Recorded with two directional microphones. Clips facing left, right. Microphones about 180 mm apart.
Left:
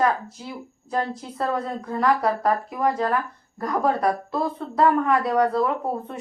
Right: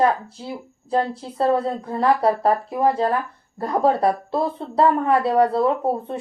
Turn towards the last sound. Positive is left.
turn(degrees=-30)  # may be behind; listen again after turning